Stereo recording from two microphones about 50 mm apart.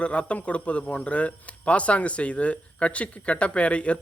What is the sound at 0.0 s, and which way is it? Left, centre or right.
A man's voice, left.